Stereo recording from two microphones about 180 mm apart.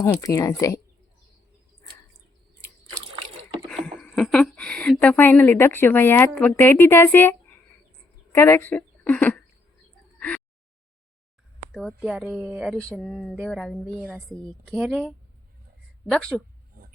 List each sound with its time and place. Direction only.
0.0 s a woman's voice: 15° left (ahead or behind)
3.7 s speech: 5° left (ahead or behind)
8.3 s a sound: 15° left (ahead or behind)
11.7 s speech: centre (ahead or behind)
16.8 s pig: 50° right (ahead or behind)